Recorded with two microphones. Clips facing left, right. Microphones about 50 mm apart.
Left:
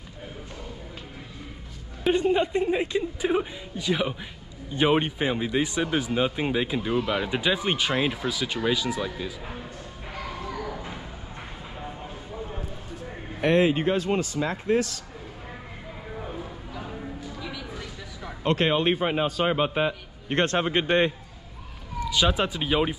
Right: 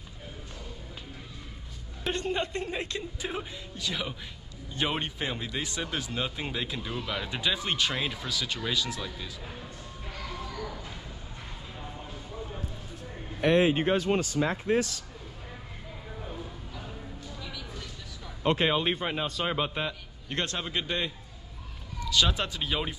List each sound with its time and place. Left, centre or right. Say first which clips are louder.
2.0 s a woman's voice: left 8 dB; centre
10.1 s a sound: left 5 dB; centre
13.4 s speech: left 2 dB; left
14.1 s a man's voice: left 2 dB; left
17.4 s a sound: left 5 dB; centre
18.6 s a woman's voice: left 4 dB; centre; by 21.1 s left
22.0 s a woman's voice: left 4 dB; centre